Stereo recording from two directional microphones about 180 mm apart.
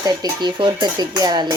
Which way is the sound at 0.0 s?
20° right (ahead or behind).